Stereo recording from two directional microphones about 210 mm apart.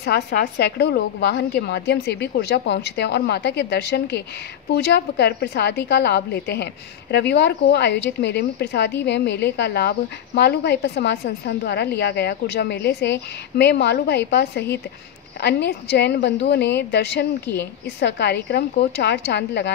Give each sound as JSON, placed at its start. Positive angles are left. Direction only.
{"t": 0.0, "sound": "a woman's voice", "side_deg": 50}